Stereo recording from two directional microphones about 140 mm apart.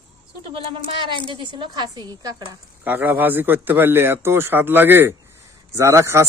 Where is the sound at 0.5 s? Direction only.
40° right (ahead or behind).